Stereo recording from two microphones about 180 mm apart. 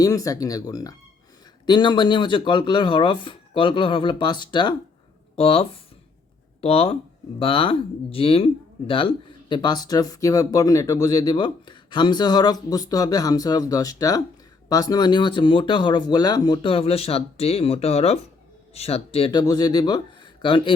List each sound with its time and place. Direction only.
0.0 s speech: 20° left (ahead or behind)